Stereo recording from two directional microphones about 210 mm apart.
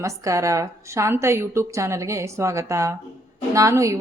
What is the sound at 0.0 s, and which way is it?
A woman's voice, 15° right (ahead or behind).